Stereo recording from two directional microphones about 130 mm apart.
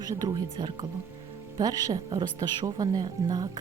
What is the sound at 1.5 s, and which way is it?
A woman's voice, 30° right (ahead or behind).